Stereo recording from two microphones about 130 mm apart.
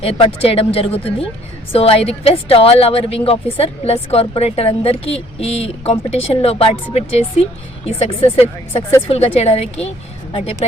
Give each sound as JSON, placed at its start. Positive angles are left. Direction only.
{"t": 0.0, "sound": "a woman's voice", "side_deg": 45}